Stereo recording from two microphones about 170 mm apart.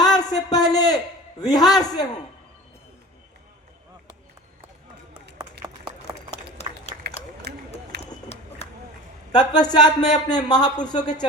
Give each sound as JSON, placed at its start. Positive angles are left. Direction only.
{"t": 0.0, "sound": "a sound", "side_deg": 25}
{"t": 1.4, "sound": "a man's voice", "side_deg": 20}
{"t": 5.4, "sound": "run", "side_deg": -25}
{"t": 6.3, "sound": "a sound", "side_deg": 40}
{"t": 7.2, "sound": "run", "side_deg": 40}
{"t": 7.9, "sound": "run", "side_deg": -75}
{"t": 9.3, "sound": "a man's voice", "side_deg": 25}